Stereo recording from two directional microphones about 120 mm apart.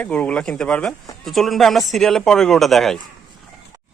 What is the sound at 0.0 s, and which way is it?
Speech, 10° left (ahead or behind).